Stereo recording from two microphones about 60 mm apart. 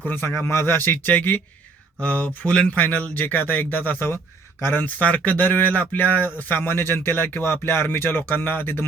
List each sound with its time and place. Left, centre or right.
0.0 s speech: left
0.3 s speech: left
2.6 s speech: left
4.9 s speech: left